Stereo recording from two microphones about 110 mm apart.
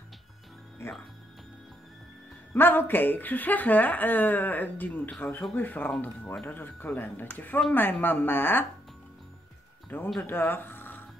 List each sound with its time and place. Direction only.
0.8 s speech: 25° left (ahead or behind)
2.5 s a woman's voice: 20° left (ahead or behind)
9.9 s a woman's voice: 20° left (ahead or behind)